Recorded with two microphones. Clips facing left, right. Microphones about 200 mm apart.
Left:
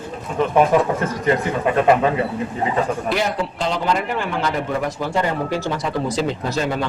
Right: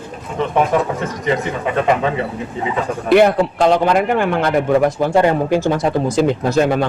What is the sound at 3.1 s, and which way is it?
Speech, 60° right (ahead or behind).